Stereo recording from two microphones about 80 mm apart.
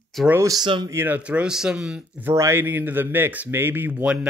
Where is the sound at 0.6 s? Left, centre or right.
Right.